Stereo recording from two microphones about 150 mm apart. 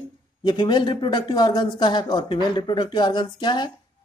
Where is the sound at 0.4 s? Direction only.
30° left (ahead or behind).